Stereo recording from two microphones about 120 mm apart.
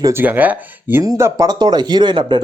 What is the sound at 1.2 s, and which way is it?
Speech, 30° right (ahead or behind).